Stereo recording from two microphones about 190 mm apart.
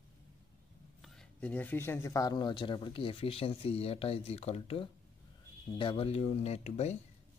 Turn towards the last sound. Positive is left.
turn(degrees=35)  # may be behind; listen again after turning